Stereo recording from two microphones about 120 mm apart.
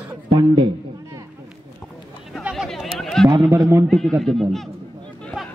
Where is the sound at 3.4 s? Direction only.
20° right (ahead or behind).